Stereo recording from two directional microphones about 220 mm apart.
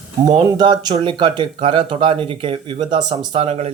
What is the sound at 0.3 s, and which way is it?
Speech, 20° right (ahead or behind).